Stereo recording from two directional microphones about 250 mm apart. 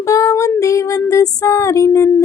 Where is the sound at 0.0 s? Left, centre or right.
Centre.